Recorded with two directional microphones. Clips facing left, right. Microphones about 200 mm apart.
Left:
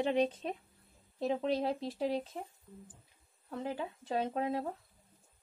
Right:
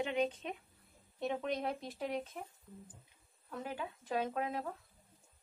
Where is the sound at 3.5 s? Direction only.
30° left (ahead or behind).